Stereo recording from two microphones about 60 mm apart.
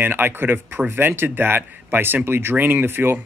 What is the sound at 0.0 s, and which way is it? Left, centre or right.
Speech, right.